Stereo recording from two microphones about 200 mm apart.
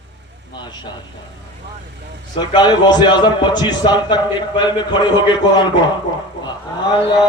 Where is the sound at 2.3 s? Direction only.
20° left (ahead or behind).